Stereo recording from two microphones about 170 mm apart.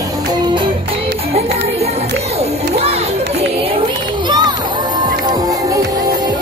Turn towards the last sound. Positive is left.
turn(degrees=-20)  # may be behind; listen again after turning